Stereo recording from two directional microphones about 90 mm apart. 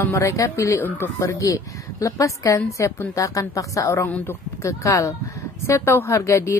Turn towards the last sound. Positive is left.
turn(degrees=35)  # may be behind; listen again after turning